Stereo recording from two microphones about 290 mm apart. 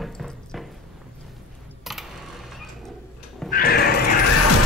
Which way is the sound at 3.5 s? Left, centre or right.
Left.